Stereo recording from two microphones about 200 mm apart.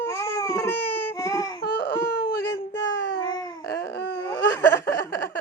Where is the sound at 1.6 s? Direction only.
50° left (ahead or behind).